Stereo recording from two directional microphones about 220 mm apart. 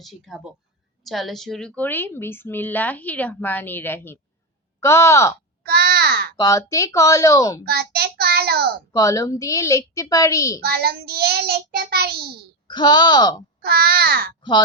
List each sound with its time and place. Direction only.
0.0 s a woman's voice: centre (ahead or behind)
5.6 s babbling: 45° right (ahead or behind)
6.3 s a woman's voice: 15° left (ahead or behind)
7.6 s child singing: 45° right (ahead or behind)
8.9 s a woman's voice: 15° left (ahead or behind)
10.6 s child singing: 45° right (ahead or behind)
12.6 s speech: 20° left (ahead or behind)
13.6 s child singing: 45° right (ahead or behind)